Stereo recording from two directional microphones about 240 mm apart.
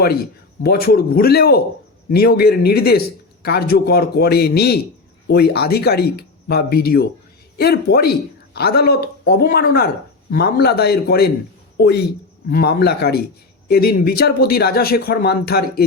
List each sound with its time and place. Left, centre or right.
0.6 s speech: left